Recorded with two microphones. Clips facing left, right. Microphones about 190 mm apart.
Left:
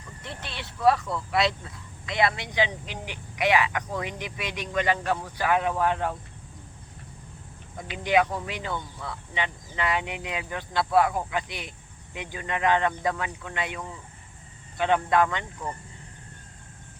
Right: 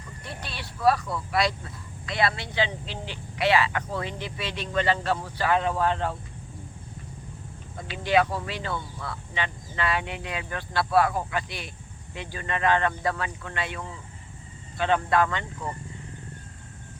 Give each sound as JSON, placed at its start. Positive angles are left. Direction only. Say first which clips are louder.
{"t": 0.4, "sound": "vehicle", "louder": "left 1 dB", "side_deg": 20}
{"t": 1.3, "sound": "speech", "louder": "left 1 dB", "side_deg": 20}
{"t": 7.8, "sound": "speech", "louder": "even", "side_deg": 15}